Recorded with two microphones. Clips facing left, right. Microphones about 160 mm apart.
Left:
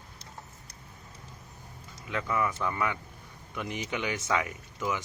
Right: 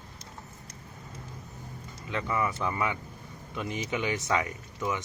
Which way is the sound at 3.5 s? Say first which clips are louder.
Right 1 dB; 30° right (ahead or behind).